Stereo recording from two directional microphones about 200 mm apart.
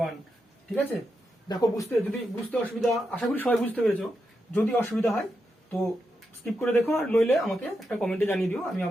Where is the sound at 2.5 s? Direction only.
5° left (ahead or behind).